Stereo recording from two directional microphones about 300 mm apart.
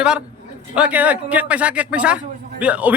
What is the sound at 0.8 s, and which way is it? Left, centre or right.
A man's voice, centre.